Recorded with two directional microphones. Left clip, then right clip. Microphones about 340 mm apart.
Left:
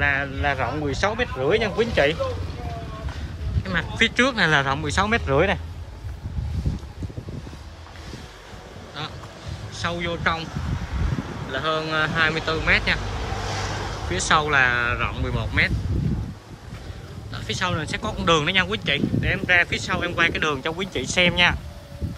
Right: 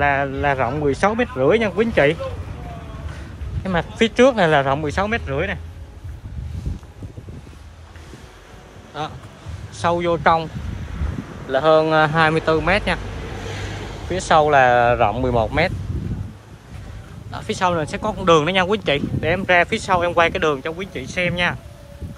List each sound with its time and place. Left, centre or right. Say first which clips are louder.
0.0 s speech: right 4 dB; centre
3.6 s speech: right 2 dB; centre
9.0 s speech: right 5 dB; centre
11.5 s speech: right 9 dB; centre
13.5 s vehicle: left 3 dB; centre
14.1 s speech: right 5 dB; centre
17.3 s speech: right 6 dB; centre